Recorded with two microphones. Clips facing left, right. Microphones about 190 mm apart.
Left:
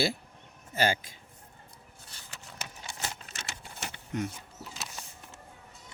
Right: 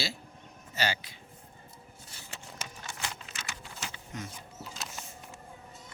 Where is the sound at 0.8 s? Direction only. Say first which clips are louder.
Left 5 dB; 50° left (ahead or behind).